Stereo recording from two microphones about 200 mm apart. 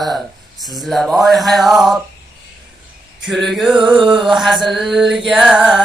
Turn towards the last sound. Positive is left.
turn(degrees=0)  # may be behind; listen again after turning